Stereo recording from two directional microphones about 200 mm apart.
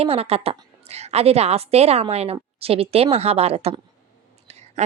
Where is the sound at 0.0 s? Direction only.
30° right (ahead or behind).